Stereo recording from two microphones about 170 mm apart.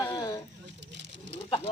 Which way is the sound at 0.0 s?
25° left (ahead or behind).